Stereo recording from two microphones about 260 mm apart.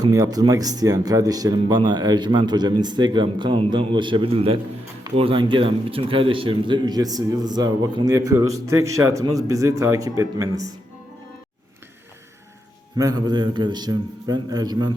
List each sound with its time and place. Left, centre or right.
0.0 s speech: centre
13.0 s speech: centre